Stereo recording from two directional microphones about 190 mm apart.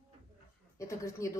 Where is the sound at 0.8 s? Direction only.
15° left (ahead or behind).